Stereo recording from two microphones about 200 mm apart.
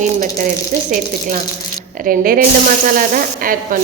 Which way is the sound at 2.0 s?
45° right (ahead or behind).